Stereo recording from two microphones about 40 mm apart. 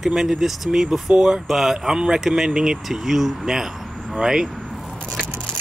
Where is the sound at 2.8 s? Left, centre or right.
Centre.